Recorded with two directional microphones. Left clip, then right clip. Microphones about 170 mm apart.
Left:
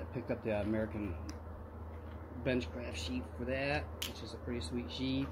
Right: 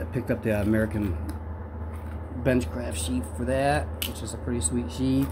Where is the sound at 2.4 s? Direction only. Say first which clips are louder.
Right 11 dB; 25° right (ahead or behind).